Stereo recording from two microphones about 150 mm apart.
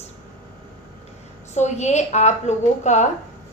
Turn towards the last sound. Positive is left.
turn(degrees=50)  # may be behind; listen again after turning